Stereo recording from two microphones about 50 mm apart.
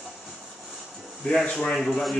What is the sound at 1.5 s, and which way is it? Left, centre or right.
Speech, centre.